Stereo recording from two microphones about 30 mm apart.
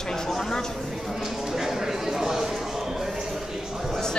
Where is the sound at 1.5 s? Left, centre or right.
Centre.